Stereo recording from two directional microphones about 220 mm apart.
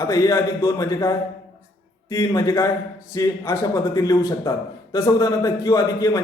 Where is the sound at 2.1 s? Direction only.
15° left (ahead or behind).